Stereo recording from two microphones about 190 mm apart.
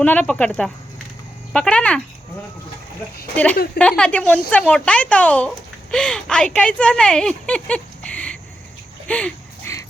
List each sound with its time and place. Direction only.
0.0 s speech: 10° left (ahead or behind)
3.3 s speech: 10° left (ahead or behind)
9.0 s a sound: 5° left (ahead or behind)